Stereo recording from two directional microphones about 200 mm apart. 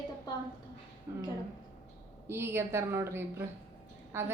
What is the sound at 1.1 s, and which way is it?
Speech, 15° right (ahead or behind).